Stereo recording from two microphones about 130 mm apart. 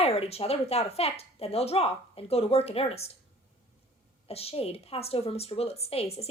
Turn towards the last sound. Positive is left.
turn(degrees=50)  # may be behind; listen again after turning